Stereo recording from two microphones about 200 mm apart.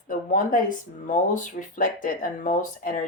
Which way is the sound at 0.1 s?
45° left (ahead or behind).